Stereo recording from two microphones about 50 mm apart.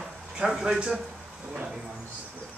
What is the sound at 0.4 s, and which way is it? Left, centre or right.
A man's voice, centre.